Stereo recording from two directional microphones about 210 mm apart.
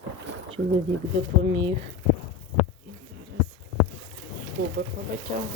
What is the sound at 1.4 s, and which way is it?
Speech, 25° right (ahead or behind).